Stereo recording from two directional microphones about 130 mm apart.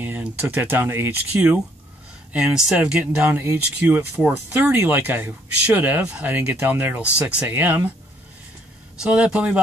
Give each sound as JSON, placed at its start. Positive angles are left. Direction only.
{"t": 0.0, "sound": "speech", "side_deg": -15}
{"t": 9.0, "sound": "speech", "side_deg": -10}